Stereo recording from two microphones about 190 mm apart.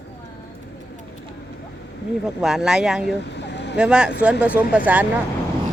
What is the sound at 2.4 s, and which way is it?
Speech, 5° right (ahead or behind).